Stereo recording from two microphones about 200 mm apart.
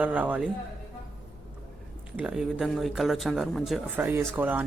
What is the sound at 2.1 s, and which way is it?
Speech, 5° right (ahead or behind).